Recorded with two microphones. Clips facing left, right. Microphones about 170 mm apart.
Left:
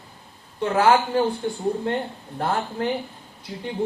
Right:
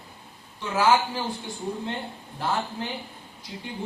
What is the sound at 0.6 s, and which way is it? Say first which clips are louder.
Speech: left 4 dB; 60° left (ahead or behind).